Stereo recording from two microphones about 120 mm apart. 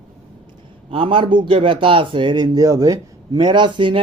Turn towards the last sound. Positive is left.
turn(degrees=-40)  # may be behind; listen again after turning